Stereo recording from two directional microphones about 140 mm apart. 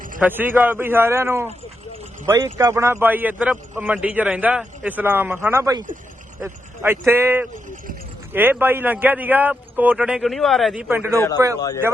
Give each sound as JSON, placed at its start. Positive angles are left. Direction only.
{"t": 0.2, "sound": "a man's voice", "side_deg": -15}
{"t": 10.8, "sound": "a man's voice", "side_deg": -15}